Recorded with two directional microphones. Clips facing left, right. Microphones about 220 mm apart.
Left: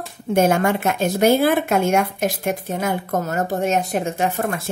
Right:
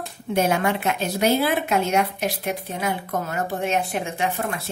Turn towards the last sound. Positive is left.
turn(degrees=45)  # may be behind; listen again after turning